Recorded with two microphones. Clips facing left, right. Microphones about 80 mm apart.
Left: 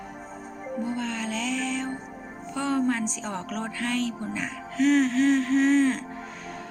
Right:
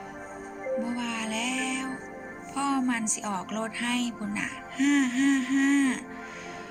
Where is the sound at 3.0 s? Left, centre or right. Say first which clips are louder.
Even; centre.